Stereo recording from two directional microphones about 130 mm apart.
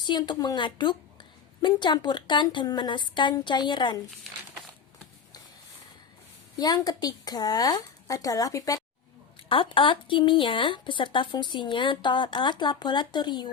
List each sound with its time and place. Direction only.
0.0 s speech: 35° left (ahead or behind)
6.6 s speech: 30° left (ahead or behind)
9.5 s speech: 40° left (ahead or behind)